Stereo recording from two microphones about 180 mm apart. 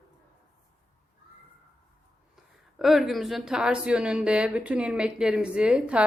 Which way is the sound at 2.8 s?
Centre (ahead or behind).